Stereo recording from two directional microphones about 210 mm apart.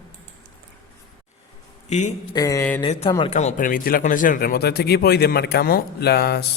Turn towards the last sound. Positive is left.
turn(degrees=50)  # may be behind; listen again after turning